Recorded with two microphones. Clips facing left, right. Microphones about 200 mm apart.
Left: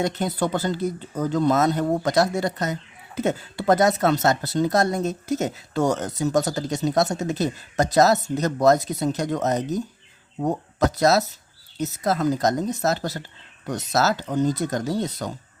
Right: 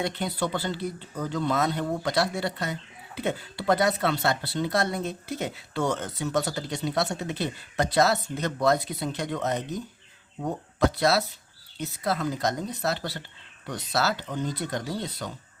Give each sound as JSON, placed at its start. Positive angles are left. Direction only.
{"t": 0.0, "sound": "speech", "side_deg": 45}